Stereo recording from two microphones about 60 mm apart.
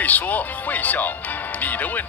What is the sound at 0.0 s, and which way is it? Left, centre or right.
Speech, left.